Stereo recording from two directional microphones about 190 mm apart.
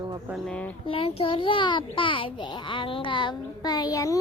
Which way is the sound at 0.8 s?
30° left (ahead or behind).